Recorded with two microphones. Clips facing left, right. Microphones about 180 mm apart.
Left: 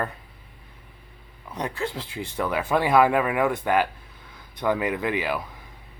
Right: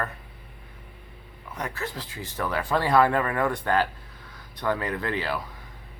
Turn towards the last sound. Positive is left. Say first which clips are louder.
# left 3 dB
turn(degrees=15)  # may be behind; listen again after turning